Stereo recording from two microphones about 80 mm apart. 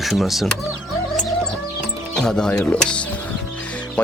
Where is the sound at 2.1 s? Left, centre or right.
Centre.